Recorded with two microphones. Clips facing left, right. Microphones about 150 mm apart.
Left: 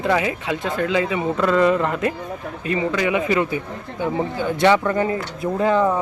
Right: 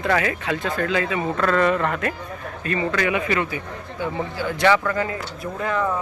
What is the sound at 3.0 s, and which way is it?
Speech, 20° left (ahead or behind).